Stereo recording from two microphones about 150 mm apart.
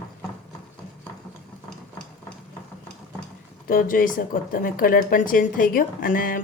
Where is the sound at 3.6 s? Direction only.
75° left (ahead or behind).